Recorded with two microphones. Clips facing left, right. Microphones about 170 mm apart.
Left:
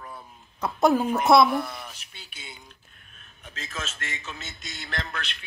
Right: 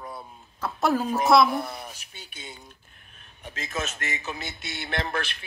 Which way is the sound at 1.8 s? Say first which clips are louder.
Right 2 dB; 45° right (ahead or behind).